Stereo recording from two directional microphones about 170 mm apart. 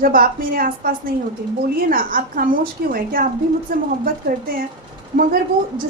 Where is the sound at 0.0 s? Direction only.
55° right (ahead or behind).